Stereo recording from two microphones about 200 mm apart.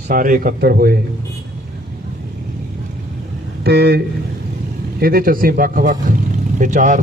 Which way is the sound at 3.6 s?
55° right (ahead or behind).